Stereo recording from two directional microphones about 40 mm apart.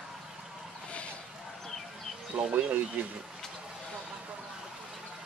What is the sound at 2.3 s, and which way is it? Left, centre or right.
Speech, right.